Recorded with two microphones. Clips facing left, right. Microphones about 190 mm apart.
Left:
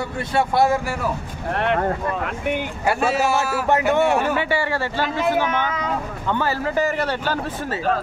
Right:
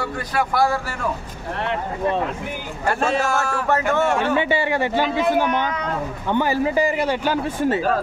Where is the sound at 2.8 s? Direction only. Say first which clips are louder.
Even; 5° left (ahead or behind).